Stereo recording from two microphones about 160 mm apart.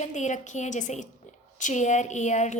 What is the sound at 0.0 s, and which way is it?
A woman's voice, 50° left (ahead or behind).